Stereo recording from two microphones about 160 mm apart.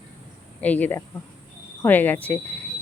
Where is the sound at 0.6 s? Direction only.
10° left (ahead or behind).